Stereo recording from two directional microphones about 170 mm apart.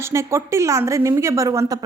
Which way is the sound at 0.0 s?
15° right (ahead or behind).